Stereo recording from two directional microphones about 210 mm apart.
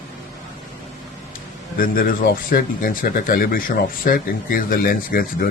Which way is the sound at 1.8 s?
45° left (ahead or behind).